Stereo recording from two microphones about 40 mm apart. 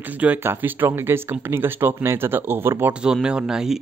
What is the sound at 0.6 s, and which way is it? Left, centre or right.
Speech, right.